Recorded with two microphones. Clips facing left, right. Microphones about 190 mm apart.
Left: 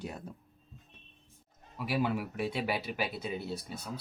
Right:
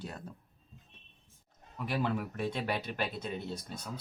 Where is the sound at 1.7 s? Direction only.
5° left (ahead or behind).